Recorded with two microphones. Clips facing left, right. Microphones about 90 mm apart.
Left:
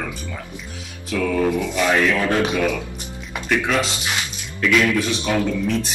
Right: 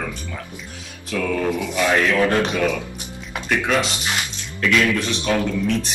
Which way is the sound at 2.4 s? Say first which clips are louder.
Even; 10° left (ahead or behind).